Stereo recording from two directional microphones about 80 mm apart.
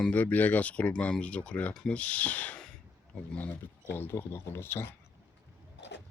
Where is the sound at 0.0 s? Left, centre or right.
Centre.